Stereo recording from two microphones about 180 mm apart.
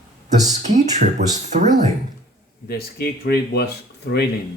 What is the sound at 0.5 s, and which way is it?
Speech, 40° right (ahead or behind).